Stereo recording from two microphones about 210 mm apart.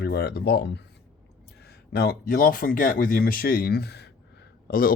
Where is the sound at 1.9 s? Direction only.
50° left (ahead or behind).